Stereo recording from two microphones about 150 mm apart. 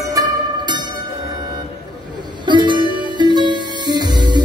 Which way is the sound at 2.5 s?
30° right (ahead or behind).